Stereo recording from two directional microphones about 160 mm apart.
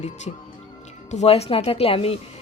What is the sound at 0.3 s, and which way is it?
Speech, 40° left (ahead or behind).